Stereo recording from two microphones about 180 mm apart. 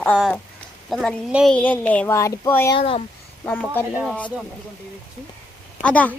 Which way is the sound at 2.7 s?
30° left (ahead or behind).